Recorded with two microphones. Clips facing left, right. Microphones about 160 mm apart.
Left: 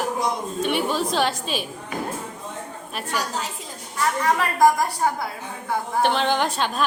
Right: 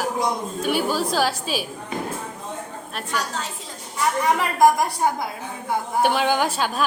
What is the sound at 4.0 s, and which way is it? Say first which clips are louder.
A woman's voice: right 1 dB; 15° right (ahead or behind).